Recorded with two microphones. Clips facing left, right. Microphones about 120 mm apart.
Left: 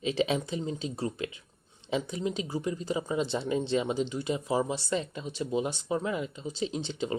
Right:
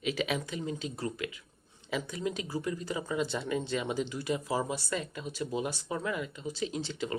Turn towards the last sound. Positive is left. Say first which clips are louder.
# left 3 dB
turn(degrees=25)  # may be behind; listen again after turning